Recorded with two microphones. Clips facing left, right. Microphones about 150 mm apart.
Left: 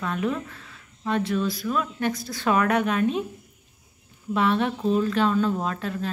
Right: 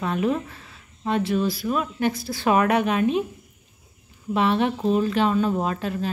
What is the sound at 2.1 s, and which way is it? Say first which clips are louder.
Speech: right 3 dB; 30° right (ahead or behind).